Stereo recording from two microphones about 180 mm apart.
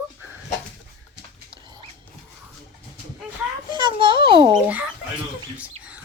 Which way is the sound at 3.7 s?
25° right (ahead or behind).